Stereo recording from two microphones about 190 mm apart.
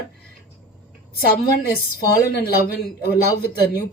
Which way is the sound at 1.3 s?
55° left (ahead or behind).